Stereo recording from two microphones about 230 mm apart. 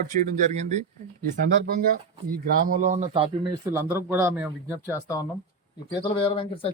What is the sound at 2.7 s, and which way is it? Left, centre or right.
Speech, right.